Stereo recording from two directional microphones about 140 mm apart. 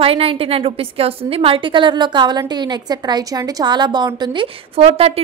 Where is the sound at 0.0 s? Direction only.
45° right (ahead or behind).